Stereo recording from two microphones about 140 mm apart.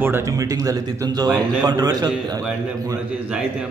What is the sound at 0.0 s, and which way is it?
Speech, 20° right (ahead or behind).